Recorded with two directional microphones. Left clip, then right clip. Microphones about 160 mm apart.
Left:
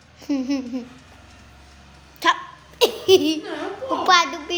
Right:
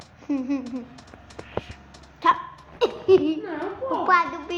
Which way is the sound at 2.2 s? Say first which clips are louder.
Left 1 dB; 50° left (ahead or behind).